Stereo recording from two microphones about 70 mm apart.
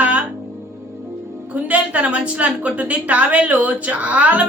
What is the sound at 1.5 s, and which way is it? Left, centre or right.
A woman's voice, right.